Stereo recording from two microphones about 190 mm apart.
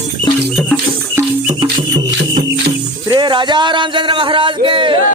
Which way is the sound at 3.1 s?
25° right (ahead or behind).